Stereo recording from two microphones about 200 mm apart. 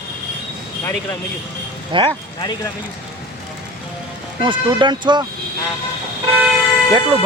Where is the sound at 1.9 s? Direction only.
25° right (ahead or behind).